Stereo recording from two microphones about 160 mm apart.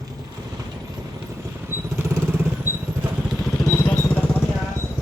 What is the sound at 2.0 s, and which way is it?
Vehicle, 15° right (ahead or behind).